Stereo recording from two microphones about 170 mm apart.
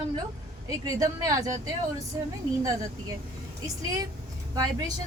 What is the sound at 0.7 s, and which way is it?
Speech, 20° right (ahead or behind).